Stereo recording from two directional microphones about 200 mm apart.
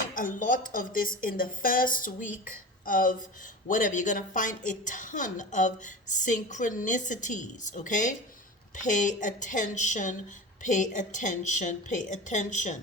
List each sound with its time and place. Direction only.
0.1 s speech: 40° left (ahead or behind)